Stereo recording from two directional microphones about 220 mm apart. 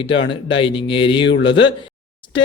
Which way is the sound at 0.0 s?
25° left (ahead or behind).